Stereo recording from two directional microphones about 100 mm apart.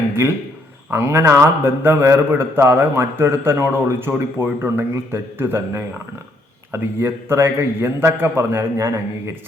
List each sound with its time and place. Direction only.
0.2 s a man's voice: 25° right (ahead or behind)